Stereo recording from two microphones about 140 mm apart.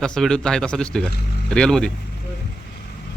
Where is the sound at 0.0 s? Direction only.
5° left (ahead or behind).